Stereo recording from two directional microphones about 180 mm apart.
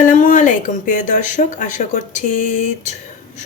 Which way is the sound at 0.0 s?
45° left (ahead or behind).